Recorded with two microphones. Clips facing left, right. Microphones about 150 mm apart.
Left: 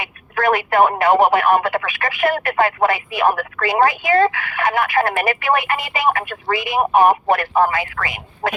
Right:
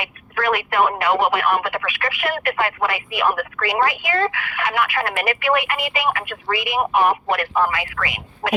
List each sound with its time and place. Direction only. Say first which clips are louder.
0.3 s speech: left 4 dB; 45° left (ahead or behind)